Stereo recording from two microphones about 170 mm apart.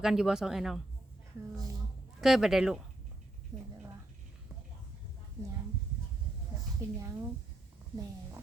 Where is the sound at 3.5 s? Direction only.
Centre (ahead or behind).